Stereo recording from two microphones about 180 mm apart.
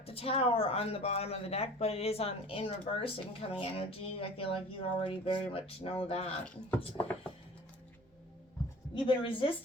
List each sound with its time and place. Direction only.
0.0 s speech: 30° left (ahead or behind)
9.0 s a woman's voice: 30° left (ahead or behind)